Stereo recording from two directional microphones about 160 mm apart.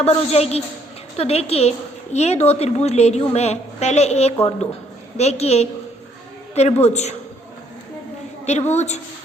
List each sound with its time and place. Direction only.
0.0 s a woman's voice: 40° left (ahead or behind)
8.4 s a woman's voice: 45° left (ahead or behind)